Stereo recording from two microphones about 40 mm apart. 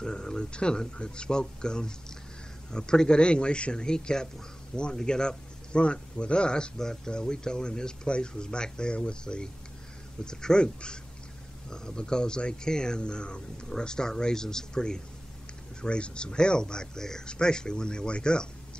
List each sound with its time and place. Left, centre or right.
0.0 s speech: centre